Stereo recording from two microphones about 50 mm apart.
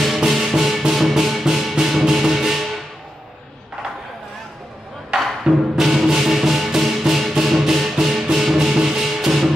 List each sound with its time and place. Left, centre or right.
0.3 s music: centre
5.4 s music: centre